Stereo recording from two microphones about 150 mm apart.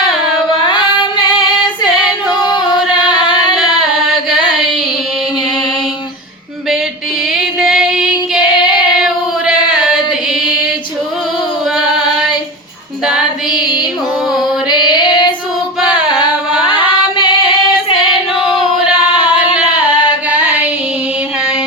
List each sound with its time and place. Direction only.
0.7 s female singing: 30° left (ahead or behind)
7.3 s female singing: 5° right (ahead or behind)
14.7 s female singing: 30° left (ahead or behind)
15.9 s carnatic music: 30° left (ahead or behind)
18.8 s singing: 5° right (ahead or behind)
20.3 s female singing: 10° right (ahead or behind)